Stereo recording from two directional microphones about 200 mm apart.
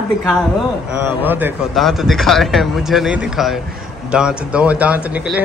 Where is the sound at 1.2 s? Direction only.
10° right (ahead or behind).